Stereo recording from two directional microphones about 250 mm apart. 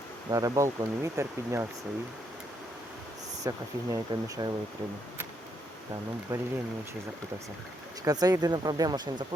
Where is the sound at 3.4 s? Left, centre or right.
Centre.